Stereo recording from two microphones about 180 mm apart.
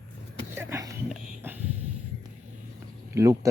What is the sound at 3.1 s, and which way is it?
Speech, 15° right (ahead or behind).